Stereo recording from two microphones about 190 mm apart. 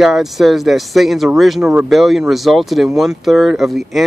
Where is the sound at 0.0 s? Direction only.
Centre (ahead or behind).